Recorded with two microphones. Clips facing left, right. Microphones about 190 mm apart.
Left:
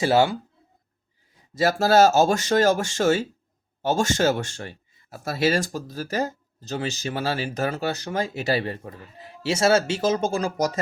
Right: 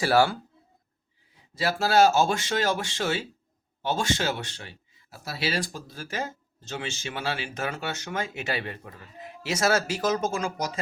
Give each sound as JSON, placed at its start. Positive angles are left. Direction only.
{"t": 0.0, "sound": "speech", "side_deg": 20}
{"t": 1.5, "sound": "speech", "side_deg": 45}